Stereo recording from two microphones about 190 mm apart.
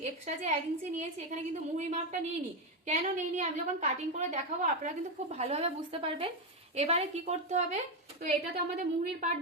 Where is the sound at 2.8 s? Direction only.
40° right (ahead or behind).